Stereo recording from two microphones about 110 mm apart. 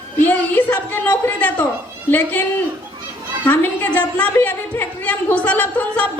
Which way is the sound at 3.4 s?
15° left (ahead or behind).